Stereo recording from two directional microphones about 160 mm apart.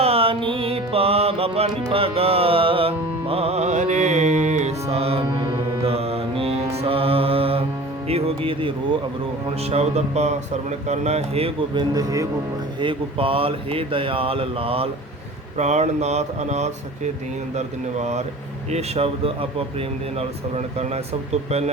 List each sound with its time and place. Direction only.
0.0 s mantra: 35° right (ahead or behind)
1.9 s music: 35° right (ahead or behind)
9.6 s speech: 40° right (ahead or behind); by 12.3 s 20° right (ahead or behind)
12.8 s speech: 35° right (ahead or behind)